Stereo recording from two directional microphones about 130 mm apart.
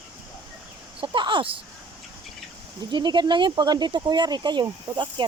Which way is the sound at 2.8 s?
35° right (ahead or behind).